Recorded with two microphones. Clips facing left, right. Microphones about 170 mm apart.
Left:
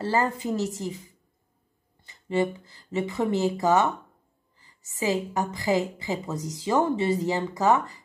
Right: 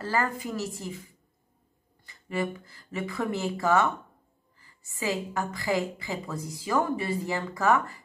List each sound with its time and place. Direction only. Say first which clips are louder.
0.0 s a woman's voice: left 4 dB; 20° left (ahead or behind)
2.0 s a woman's voice: left 5 dB; 25° left (ahead or behind)